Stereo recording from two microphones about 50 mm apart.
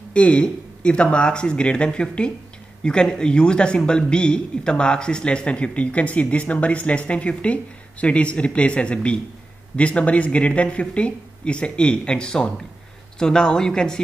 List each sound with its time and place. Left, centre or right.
0.1 s speech: left